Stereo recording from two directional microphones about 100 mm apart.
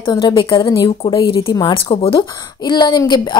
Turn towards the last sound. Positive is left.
turn(degrees=50)  # may be behind; listen again after turning